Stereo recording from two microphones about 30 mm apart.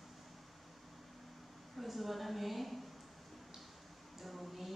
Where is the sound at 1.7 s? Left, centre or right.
Centre.